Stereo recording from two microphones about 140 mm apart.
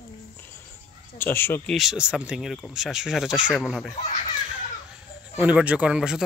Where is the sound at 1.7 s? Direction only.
Centre (ahead or behind).